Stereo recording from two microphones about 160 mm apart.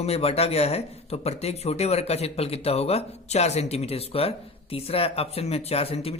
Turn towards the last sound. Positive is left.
turn(degrees=40)  # may be behind; listen again after turning